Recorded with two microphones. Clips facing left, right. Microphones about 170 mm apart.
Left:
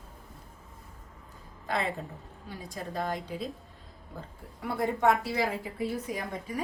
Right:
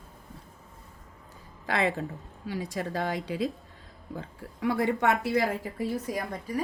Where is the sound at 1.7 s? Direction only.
75° right (ahead or behind).